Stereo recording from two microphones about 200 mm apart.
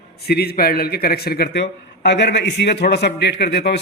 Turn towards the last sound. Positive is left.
turn(degrees=55)  # may be behind; listen again after turning